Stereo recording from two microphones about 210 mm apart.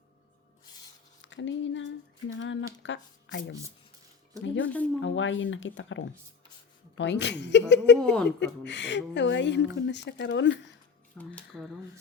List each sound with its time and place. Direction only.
1.2 s a sound: 60° left (ahead or behind)
4.4 s speech: 65° left (ahead or behind)
7.9 s a woman's voice: 5° left (ahead or behind)
8.4 s speech: 55° left (ahead or behind)
11.2 s speech: 5° left (ahead or behind)